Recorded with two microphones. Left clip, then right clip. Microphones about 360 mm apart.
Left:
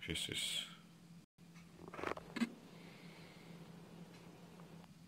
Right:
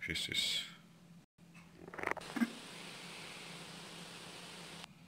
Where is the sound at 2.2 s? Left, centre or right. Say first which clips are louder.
Right 5 dB; right.